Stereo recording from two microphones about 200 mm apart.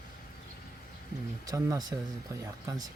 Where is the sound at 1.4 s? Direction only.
15° right (ahead or behind).